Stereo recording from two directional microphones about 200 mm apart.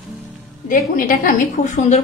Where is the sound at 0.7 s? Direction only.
40° left (ahead or behind).